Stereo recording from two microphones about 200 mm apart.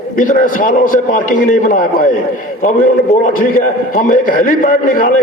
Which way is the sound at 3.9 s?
40° left (ahead or behind).